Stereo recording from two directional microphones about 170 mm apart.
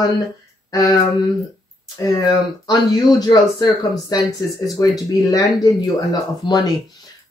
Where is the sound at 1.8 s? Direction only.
20° left (ahead or behind).